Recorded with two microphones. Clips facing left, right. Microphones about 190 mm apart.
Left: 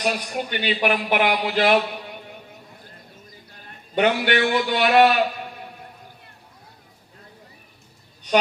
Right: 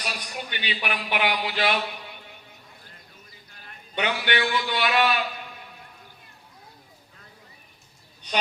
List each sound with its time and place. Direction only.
0.0 s speech: 45° left (ahead or behind)
3.9 s a man's voice: 45° left (ahead or behind)